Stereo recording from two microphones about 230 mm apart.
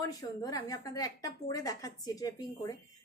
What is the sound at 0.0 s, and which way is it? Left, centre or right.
A woman's voice, centre.